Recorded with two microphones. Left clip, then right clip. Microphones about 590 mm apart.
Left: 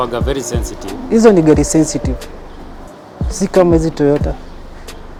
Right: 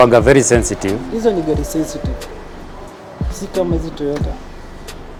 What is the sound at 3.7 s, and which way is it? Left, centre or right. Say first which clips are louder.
Speech: left 8 dB; left.